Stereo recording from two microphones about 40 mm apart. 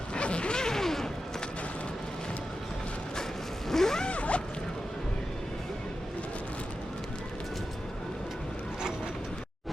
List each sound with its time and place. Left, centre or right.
0.1 s a sound: left; by 1.1 s centre
3.7 s zipper: centre
4.0 s zipper: left